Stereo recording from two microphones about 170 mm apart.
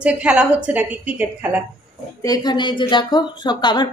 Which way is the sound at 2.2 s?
20° left (ahead or behind).